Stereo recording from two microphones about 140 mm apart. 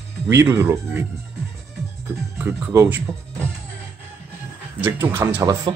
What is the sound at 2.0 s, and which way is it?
Speech, 20° right (ahead or behind).